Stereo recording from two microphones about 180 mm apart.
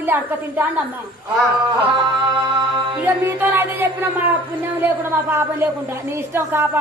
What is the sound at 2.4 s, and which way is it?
Music, 20° right (ahead or behind).